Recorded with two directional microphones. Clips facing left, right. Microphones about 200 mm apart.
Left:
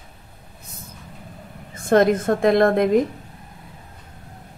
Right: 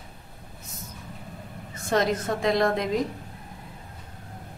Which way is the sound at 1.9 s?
55° left (ahead or behind).